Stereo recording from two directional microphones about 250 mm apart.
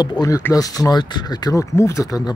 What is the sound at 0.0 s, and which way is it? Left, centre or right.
Speech, centre.